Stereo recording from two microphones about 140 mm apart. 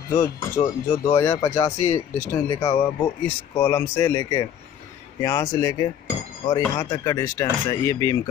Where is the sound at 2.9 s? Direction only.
20° left (ahead or behind).